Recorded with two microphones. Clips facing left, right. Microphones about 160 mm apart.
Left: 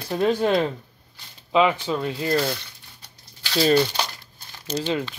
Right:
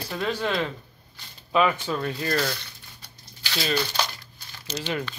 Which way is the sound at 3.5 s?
30° left (ahead or behind).